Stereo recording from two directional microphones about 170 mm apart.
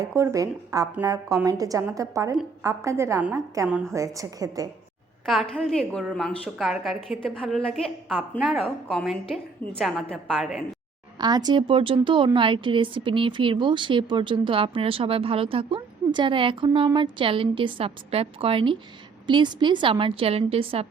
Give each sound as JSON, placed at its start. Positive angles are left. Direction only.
{"t": 0.0, "sound": "a woman's voice", "side_deg": -15}
{"t": 3.7, "sound": "a woman's voice", "side_deg": -5}
{"t": 3.9, "sound": "speech", "side_deg": -20}
{"t": 5.2, "sound": "a woman's voice", "side_deg": 0}
{"t": 11.2, "sound": "a woman's voice", "side_deg": -25}